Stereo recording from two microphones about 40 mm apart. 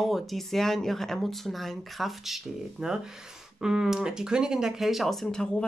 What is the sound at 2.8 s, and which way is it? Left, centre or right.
Speech, centre.